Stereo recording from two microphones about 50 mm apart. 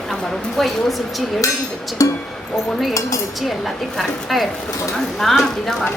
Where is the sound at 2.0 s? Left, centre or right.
Left.